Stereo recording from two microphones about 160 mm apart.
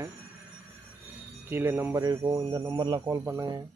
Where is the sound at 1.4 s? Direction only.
15° right (ahead or behind).